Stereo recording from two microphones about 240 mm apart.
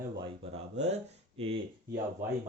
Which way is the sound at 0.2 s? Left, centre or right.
Right.